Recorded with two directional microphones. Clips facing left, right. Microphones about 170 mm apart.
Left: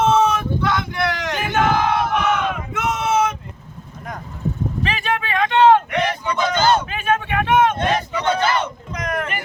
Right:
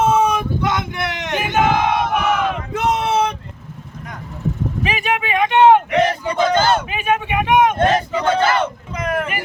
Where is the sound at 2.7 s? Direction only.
35° right (ahead or behind).